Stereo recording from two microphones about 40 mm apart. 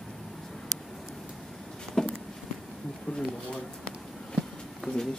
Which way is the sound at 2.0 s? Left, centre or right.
Centre.